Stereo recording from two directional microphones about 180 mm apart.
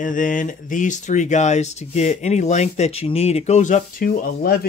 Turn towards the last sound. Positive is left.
turn(degrees=50)  # may be behind; listen again after turning